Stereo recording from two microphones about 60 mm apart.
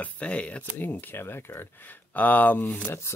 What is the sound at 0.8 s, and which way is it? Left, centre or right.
Speech, left.